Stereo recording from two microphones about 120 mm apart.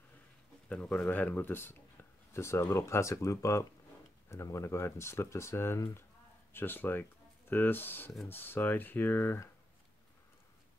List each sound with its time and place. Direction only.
0.7 s speech: 10° left (ahead or behind)